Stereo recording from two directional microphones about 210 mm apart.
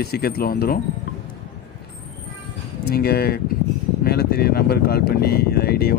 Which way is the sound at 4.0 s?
50° left (ahead or behind).